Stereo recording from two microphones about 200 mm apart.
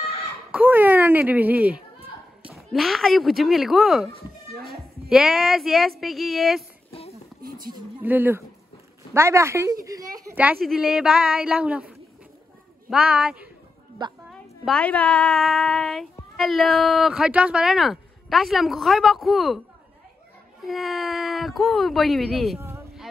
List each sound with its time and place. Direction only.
0.5 s speech: 10° right (ahead or behind)
6.9 s music: 30° left (ahead or behind)
8.0 s speech: 10° right (ahead or behind)
12.9 s speech: 5° right (ahead or behind)
14.0 s a woman's voice: 20° right (ahead or behind)
14.6 s speech: 5° left (ahead or behind)
20.6 s speech: centre (ahead or behind)